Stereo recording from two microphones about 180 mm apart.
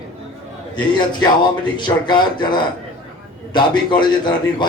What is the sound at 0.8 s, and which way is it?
Speech, 25° left (ahead or behind).